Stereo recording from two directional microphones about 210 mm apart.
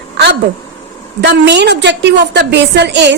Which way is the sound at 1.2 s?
55° right (ahead or behind).